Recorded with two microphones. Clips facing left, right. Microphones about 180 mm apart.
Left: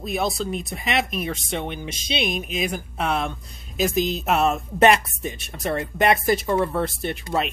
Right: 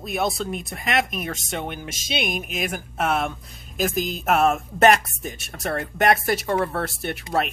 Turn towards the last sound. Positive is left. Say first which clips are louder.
# left 2 dB
turn(degrees=0)  # may be behind; listen again after turning